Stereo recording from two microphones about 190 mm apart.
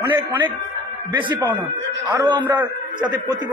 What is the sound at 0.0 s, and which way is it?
Speech, 10° right (ahead or behind).